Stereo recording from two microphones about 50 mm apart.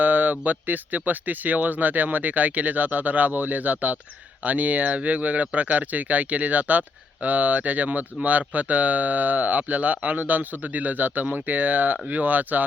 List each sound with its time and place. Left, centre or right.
0.0 s speech: right